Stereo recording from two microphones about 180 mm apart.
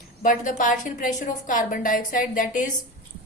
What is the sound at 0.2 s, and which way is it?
A woman's voice, 45° left (ahead or behind).